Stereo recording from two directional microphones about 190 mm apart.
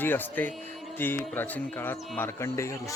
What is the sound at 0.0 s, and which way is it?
Speech, 10° left (ahead or behind).